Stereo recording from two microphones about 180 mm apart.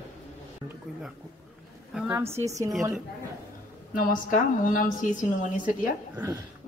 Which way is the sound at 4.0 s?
50° left (ahead or behind).